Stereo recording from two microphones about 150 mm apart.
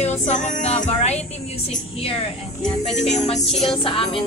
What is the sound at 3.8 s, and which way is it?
Music, 35° left (ahead or behind).